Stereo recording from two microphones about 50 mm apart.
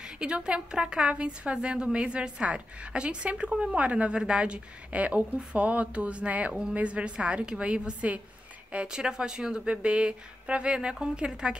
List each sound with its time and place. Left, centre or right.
0.0 s a woman's voice: centre